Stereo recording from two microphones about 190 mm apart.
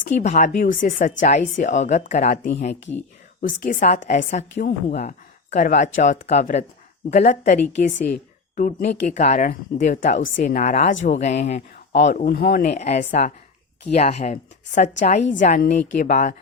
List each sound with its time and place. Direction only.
0.2 s a woman's voice: 40° left (ahead or behind)
12.0 s a woman's voice: 50° left (ahead or behind)